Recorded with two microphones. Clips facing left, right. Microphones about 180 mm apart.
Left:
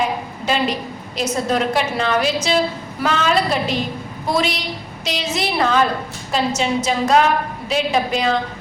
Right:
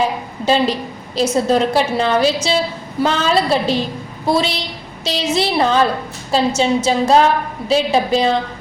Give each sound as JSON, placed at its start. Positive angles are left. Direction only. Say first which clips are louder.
{"t": 0.0, "sound": "a woman's voice", "louder": "right 3 dB", "side_deg": -30}